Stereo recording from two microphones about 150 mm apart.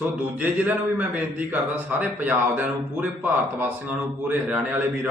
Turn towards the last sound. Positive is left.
turn(degrees=-10)  # may be behind; listen again after turning